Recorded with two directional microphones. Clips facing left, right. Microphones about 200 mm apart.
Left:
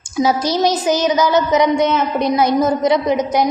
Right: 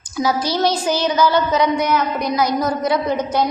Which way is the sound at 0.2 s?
25° left (ahead or behind).